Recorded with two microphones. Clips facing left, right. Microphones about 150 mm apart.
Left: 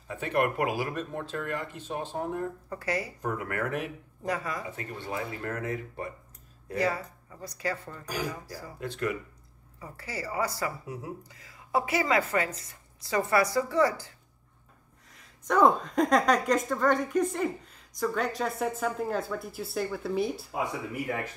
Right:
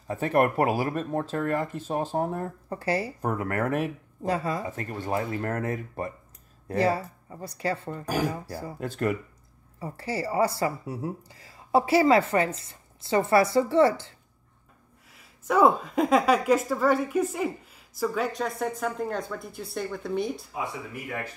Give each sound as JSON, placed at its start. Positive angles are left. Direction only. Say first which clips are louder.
{"t": 0.1, "sound": "speech", "louder": "right 5 dB", "side_deg": -40}
{"t": 3.3, "sound": "speech", "louder": "right 5 dB", "side_deg": -40}
{"t": 4.3, "sound": "speech", "louder": "right 5 dB", "side_deg": -30}
{"t": 4.6, "sound": "speech", "louder": "right 5 dB", "side_deg": -45}
{"t": 6.7, "sound": "speech", "louder": "right 4 dB", "side_deg": -30}
{"t": 8.0, "sound": "speech", "louder": "right 8 dB", "side_deg": -50}
{"t": 8.3, "sound": "speech", "louder": "right 5 dB", "side_deg": -30}
{"t": 8.7, "sound": "speech", "louder": "right 4 dB", "side_deg": -45}
{"t": 9.8, "sound": "speech", "louder": "right 7 dB", "side_deg": -30}
{"t": 15.0, "sound": "a woman's voice", "louder": "right 2 dB", "side_deg": -5}